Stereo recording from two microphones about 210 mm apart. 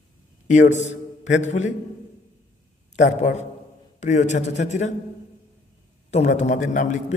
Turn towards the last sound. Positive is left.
turn(degrees=35)  # may be behind; listen again after turning